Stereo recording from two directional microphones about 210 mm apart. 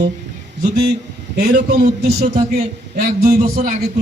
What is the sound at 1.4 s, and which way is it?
A man's voice, 40° right (ahead or behind).